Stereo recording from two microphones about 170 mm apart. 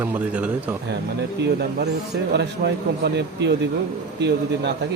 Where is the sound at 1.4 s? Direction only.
80° right.